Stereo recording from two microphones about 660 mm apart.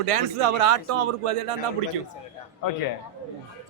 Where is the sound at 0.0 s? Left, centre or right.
Right.